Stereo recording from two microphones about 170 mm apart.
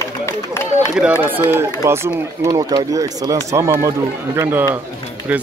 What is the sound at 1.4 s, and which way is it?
Speech, 15° right (ahead or behind).